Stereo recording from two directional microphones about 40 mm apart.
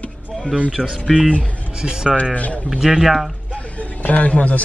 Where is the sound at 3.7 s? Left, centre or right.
Left.